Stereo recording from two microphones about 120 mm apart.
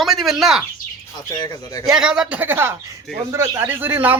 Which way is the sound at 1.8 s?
5° right (ahead or behind).